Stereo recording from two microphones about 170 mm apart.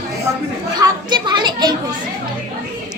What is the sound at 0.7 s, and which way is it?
A child's voice, 25° right (ahead or behind).